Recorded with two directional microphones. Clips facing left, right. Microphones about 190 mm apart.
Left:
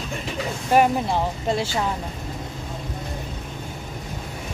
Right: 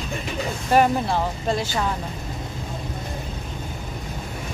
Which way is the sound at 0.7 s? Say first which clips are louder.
Even; 15° left (ahead or behind).